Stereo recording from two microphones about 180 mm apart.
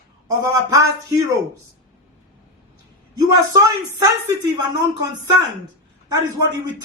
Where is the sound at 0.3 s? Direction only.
20° right (ahead or behind).